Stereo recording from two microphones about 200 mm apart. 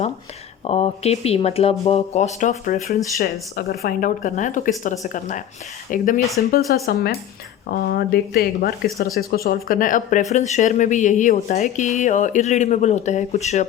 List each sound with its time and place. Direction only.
0.6 s speech: 30° left (ahead or behind)
3.5 s a woman's voice: 50° left (ahead or behind); by 13.7 s 35° left (ahead or behind)